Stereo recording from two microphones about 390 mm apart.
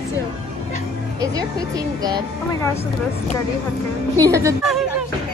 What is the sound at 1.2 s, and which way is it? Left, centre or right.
Speech, centre.